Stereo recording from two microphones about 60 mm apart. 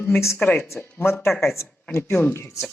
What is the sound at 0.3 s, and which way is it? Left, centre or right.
Speech, left.